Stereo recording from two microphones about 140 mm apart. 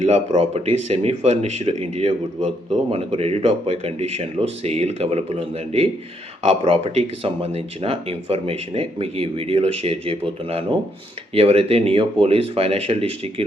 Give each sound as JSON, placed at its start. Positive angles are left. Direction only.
{"t": 0.0, "sound": "speech", "side_deg": -55}